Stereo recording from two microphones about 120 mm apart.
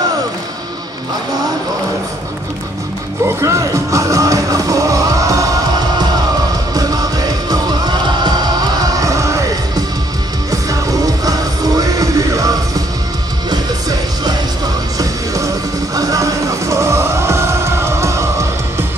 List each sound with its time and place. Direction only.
3.3 s music: 25° right (ahead or behind)
6.7 s music: 30° right (ahead or behind)